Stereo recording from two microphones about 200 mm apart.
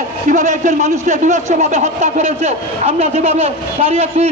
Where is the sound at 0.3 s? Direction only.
40° right (ahead or behind).